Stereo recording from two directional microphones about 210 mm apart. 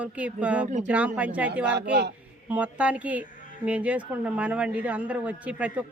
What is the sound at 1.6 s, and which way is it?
Speech, 55° right (ahead or behind).